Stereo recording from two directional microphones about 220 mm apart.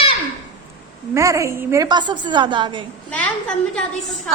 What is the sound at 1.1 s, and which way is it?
A woman's voice, 15° right (ahead or behind).